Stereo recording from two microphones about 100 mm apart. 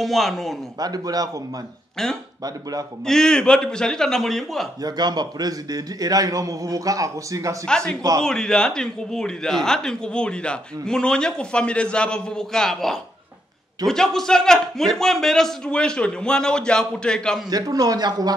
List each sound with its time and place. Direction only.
0.0 s speech: centre (ahead or behind)
0.7 s a man's voice: 40° right (ahead or behind)
3.1 s speech: 5° left (ahead or behind)
4.8 s a man's voice: 45° right (ahead or behind)
7.6 s speech: 10° left (ahead or behind)
17.5 s a man's voice: 40° right (ahead or behind)